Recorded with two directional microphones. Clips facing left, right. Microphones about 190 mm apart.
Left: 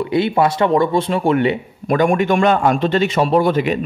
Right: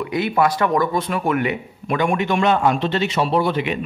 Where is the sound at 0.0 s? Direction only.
30° left (ahead or behind).